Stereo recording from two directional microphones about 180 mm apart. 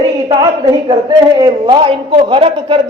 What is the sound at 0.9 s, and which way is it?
A man's voice, 25° right (ahead or behind).